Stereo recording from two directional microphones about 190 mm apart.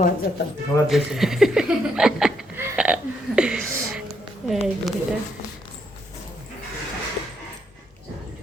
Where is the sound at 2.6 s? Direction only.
5° right (ahead or behind).